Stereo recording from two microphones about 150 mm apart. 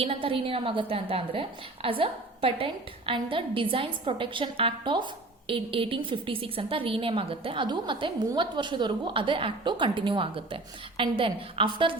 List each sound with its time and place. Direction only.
0.0 s a woman's voice: 35° right (ahead or behind)